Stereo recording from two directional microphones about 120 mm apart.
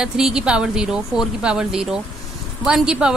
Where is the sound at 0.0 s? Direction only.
5° right (ahead or behind).